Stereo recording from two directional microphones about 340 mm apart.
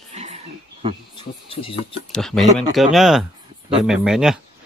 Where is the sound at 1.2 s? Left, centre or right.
Centre.